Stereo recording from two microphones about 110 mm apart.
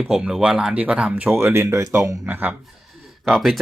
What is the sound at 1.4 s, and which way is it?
Speech, 25° right (ahead or behind).